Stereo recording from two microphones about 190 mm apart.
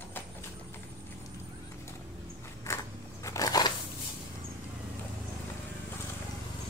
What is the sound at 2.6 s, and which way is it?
Biting, 15° left (ahead or behind).